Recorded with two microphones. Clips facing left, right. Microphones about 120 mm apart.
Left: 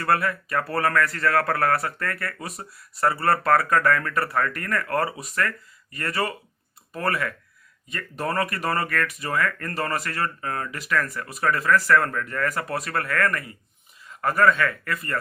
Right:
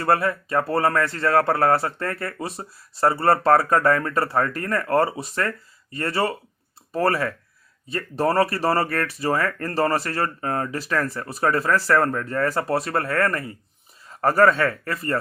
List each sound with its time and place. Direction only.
0.0 s speech: 25° right (ahead or behind)